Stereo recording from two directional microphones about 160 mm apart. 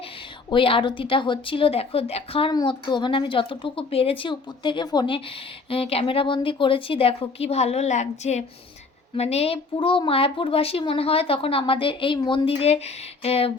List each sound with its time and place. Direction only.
0.5 s a woman's voice: 35° left (ahead or behind)